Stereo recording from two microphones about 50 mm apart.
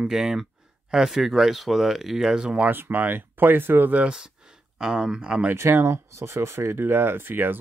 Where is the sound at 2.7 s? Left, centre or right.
Right.